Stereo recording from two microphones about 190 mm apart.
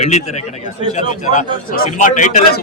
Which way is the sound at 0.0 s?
35° left (ahead or behind).